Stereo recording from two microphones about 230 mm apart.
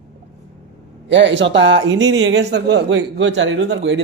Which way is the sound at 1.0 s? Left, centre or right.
Right.